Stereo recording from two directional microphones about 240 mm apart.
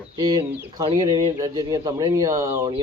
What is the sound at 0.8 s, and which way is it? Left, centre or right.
Speech, centre.